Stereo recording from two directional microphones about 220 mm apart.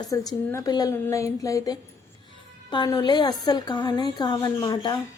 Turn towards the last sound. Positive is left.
turn(degrees=20)  # may be behind; listen again after turning